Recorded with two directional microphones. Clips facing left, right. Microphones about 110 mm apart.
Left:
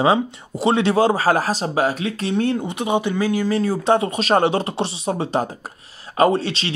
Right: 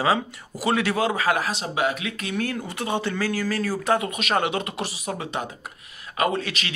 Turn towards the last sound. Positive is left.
turn(degrees=30)  # may be behind; listen again after turning